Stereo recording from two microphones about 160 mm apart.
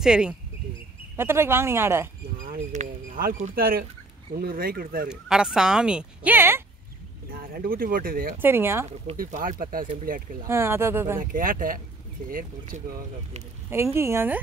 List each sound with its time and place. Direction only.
0.0 s speech: 5° right (ahead or behind)
1.1 s speech: 15° right (ahead or behind)
2.4 s speech: 55° right (ahead or behind)
3.5 s speech: 65° right (ahead or behind)
5.1 s speech: 5° right (ahead or behind)
7.2 s speech: 65° right (ahead or behind)
8.4 s speech: 15° right (ahead or behind)
9.1 s speech: 60° right (ahead or behind)
10.4 s speech: 15° right (ahead or behind)
11.1 s speech: 60° right (ahead or behind)
13.9 s speech: 15° right (ahead or behind)